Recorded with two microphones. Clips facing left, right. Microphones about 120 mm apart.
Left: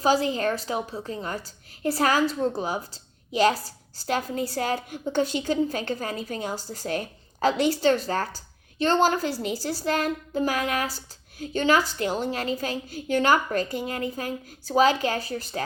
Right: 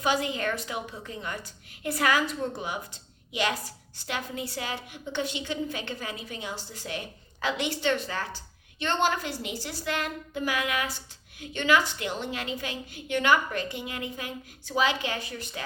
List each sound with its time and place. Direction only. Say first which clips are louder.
0.0 s a woman's voice: left 5 dB; 35° left (ahead or behind)